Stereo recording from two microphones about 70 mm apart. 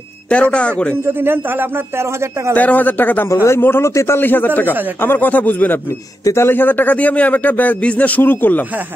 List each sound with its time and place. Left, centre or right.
0.3 s a man's voice: centre
1.0 s speech: right
2.5 s a man's voice: left